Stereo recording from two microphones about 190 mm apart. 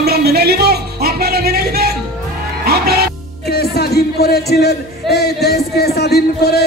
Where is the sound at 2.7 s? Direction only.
55° right (ahead or behind).